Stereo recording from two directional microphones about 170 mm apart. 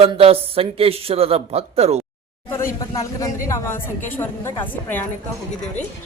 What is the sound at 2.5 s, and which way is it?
A woman's voice, 15° left (ahead or behind).